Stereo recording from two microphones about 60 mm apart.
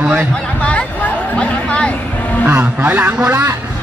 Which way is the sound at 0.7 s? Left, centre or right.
Left.